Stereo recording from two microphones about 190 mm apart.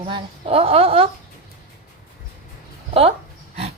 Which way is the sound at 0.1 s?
30° right (ahead or behind).